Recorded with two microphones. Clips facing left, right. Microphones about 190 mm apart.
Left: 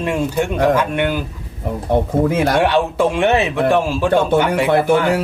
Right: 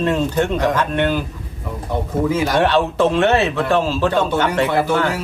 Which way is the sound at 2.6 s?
15° left (ahead or behind).